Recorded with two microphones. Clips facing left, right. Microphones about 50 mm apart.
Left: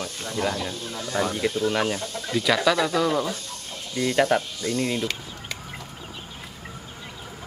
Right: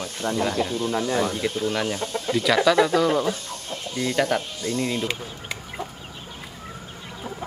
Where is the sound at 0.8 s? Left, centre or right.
Right.